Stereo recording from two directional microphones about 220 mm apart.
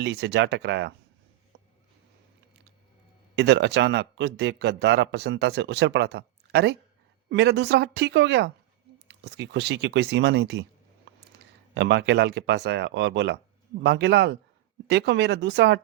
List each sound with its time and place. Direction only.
0.0 s a man's voice: 50° right (ahead or behind)
3.3 s a man's voice: 50° right (ahead or behind)
11.7 s a man's voice: 50° right (ahead or behind)